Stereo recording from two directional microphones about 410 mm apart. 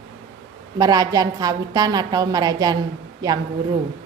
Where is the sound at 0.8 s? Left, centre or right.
Centre.